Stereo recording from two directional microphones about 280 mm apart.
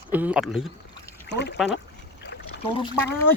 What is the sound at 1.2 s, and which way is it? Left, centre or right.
Speech, left.